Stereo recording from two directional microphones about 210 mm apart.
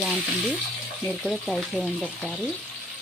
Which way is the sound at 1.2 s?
Centre (ahead or behind).